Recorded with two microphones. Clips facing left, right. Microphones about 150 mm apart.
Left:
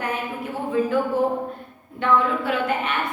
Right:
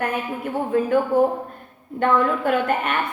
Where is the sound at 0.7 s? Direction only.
50° right (ahead or behind).